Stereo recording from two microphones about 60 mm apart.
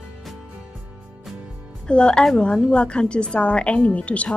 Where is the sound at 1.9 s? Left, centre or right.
Centre.